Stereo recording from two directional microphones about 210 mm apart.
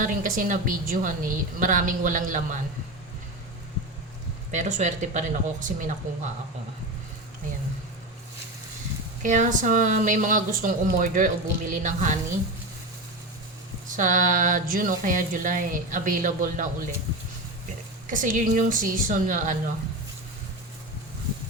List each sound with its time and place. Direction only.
0.0 s a woman's voice: 40° right (ahead or behind)
4.5 s a woman's voice: 35° right (ahead or behind)
9.2 s a woman's voice: 35° right (ahead or behind)
13.8 s a woman's voice: 40° right (ahead or behind)
18.1 s a woman's voice: 40° right (ahead or behind)